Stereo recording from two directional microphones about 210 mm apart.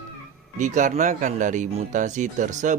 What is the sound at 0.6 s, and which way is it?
Speech, 35° right (ahead or behind).